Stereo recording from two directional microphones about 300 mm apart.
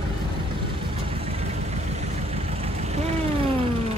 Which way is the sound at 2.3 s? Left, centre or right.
Right.